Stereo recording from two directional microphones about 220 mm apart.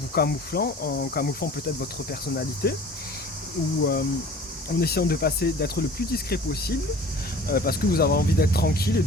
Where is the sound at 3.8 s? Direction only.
45° left (ahead or behind).